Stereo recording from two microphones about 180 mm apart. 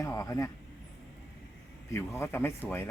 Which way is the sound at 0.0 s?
20° left (ahead or behind).